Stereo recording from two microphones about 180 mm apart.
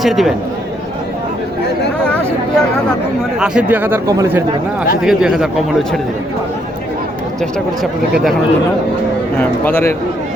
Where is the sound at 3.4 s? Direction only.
5° right (ahead or behind).